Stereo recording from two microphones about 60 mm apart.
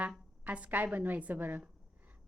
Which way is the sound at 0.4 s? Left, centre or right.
Right.